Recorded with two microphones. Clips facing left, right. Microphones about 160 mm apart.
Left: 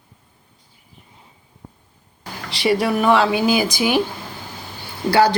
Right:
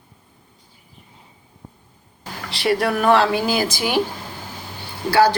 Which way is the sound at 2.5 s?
Centre (ahead or behind).